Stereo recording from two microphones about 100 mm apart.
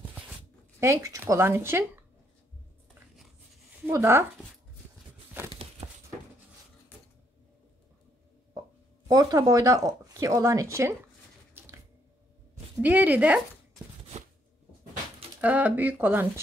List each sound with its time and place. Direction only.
0.7 s speech: 30° right (ahead or behind)
3.9 s speech: 25° right (ahead or behind)
5.4 s crumpling: 20° right (ahead or behind)
9.0 s speech: 35° right (ahead or behind)
11.6 s a sound: 20° right (ahead or behind)
12.8 s speech: 15° right (ahead or behind)
15.4 s speech: 15° right (ahead or behind)